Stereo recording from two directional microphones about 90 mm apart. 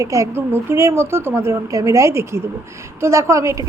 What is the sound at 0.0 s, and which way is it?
A woman's voice, 35° right (ahead or behind).